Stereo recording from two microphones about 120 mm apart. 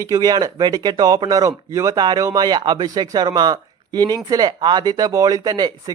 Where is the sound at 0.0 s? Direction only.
30° right (ahead or behind).